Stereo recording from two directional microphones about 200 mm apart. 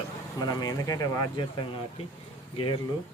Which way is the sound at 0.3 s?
20° left (ahead or behind).